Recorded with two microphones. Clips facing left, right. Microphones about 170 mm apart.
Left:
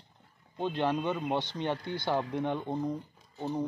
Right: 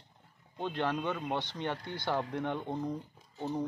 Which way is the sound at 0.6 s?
15° left (ahead or behind).